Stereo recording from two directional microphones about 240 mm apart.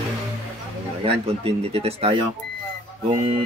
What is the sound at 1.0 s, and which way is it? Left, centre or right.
Speech, right.